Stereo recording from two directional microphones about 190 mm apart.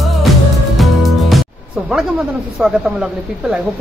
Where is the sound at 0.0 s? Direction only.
Centre (ahead or behind).